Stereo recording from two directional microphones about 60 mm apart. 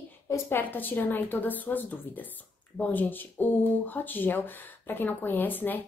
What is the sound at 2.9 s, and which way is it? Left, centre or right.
A woman's voice, left.